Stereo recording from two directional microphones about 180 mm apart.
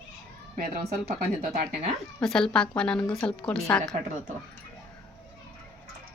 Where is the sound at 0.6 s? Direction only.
50° right (ahead or behind).